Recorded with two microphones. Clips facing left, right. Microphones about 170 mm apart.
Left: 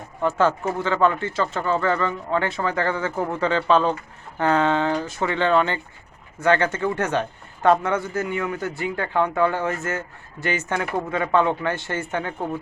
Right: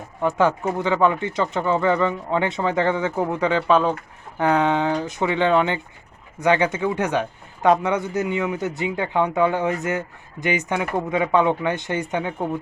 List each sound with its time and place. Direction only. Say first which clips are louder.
0.2 s speech: right 1 dB; 15° right (ahead or behind)